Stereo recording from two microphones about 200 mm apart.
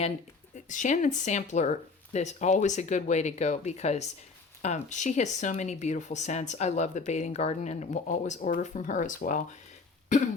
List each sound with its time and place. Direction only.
0.5 s speech: 40° left (ahead or behind)